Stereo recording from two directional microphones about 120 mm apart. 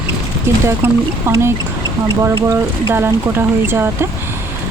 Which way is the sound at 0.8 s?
20° right (ahead or behind).